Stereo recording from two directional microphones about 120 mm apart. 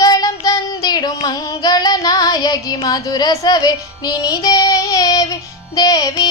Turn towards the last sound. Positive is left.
turn(degrees=35)  # may be behind; listen again after turning